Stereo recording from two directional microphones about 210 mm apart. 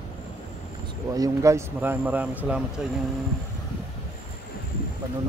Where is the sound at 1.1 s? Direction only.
15° right (ahead or behind).